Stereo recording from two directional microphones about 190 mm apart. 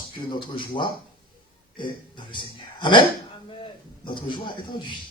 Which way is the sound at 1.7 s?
25° left (ahead or behind).